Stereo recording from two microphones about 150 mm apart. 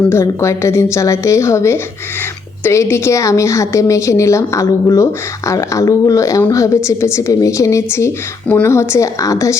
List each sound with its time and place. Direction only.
0.1 s a woman's voice: 20° left (ahead or behind)